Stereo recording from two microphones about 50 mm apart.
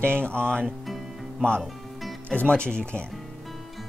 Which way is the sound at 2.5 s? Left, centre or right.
Centre.